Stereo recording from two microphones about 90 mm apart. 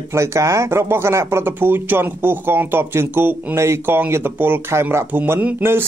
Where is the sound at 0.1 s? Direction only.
30° right (ahead or behind).